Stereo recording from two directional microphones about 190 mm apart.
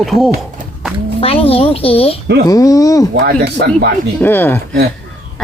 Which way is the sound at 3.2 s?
55° right (ahead or behind).